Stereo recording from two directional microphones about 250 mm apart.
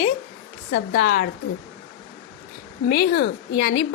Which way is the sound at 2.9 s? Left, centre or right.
Left.